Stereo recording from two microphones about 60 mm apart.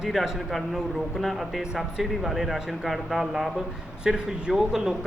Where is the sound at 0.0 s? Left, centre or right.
Centre.